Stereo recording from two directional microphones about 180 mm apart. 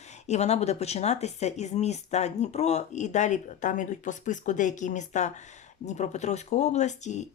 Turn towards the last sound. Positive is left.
turn(degrees=40)  # may be behind; listen again after turning